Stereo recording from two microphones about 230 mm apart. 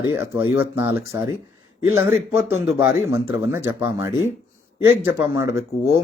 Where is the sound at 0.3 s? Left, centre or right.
Left.